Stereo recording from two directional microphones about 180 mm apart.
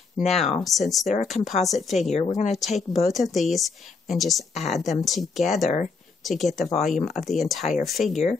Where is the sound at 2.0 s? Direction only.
40° left (ahead or behind).